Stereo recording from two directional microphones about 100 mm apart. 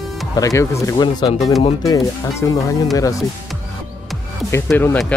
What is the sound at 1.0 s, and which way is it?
Speech, 45° left (ahead or behind).